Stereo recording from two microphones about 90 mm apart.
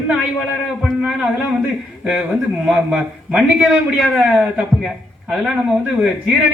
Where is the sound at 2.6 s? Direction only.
5° right (ahead or behind).